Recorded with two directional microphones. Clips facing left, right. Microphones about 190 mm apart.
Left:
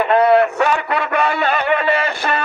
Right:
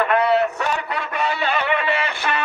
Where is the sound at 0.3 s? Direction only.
65° left (ahead or behind).